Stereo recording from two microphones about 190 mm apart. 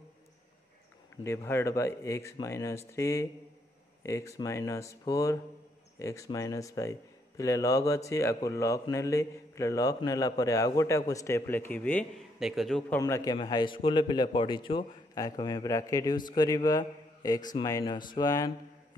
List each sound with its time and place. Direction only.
1.1 s speech: 15° left (ahead or behind)
13.0 s a man's voice: 20° left (ahead or behind)